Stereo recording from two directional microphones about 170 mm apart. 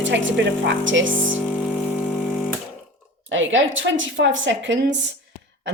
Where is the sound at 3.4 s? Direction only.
90° right.